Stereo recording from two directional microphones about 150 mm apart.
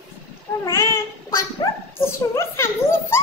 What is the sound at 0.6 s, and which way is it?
A child's voice, 20° left (ahead or behind).